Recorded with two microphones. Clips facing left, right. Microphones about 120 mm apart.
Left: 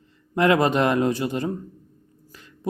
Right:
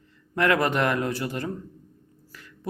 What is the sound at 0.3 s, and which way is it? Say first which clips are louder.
Speech: left 4 dB; 20° left (ahead or behind).